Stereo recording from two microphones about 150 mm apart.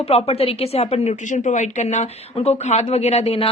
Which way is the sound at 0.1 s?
45° left (ahead or behind).